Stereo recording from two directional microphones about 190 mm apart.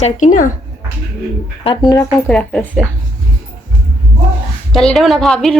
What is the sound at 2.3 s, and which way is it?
Speech, 5° left (ahead or behind).